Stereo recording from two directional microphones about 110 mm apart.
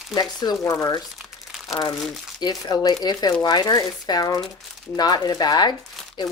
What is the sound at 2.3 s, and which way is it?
Speech, 35° left (ahead or behind).